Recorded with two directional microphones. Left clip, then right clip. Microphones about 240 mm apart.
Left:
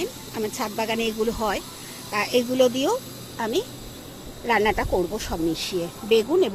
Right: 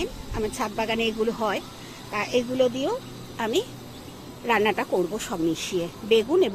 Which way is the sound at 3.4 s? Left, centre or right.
Centre.